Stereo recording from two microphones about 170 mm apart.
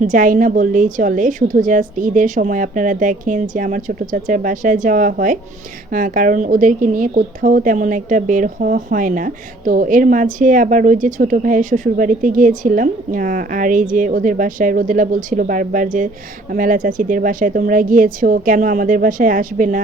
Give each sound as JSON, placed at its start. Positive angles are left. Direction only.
{"t": 0.0, "sound": "a woman's voice", "side_deg": -55}